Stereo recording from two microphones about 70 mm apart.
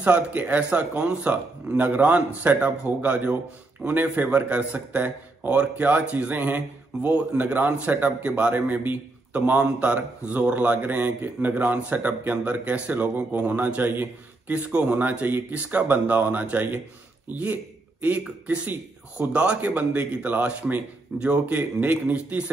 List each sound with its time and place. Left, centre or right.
0.0 s a man's voice: right